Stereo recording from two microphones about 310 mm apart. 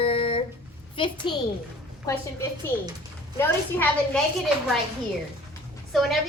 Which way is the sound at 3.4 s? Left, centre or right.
Centre.